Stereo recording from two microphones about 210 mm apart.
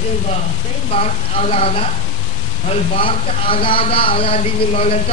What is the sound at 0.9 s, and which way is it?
A man's voice, 30° left (ahead or behind).